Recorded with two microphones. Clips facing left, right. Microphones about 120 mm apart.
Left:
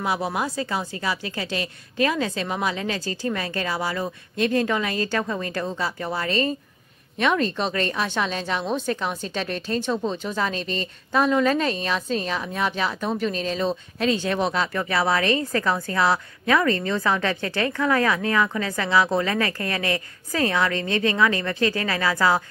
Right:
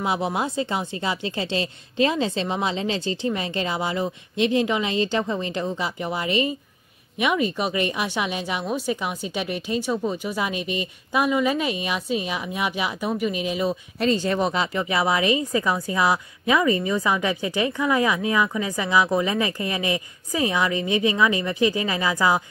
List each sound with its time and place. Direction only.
0.0 s a woman's voice: 20° right (ahead or behind)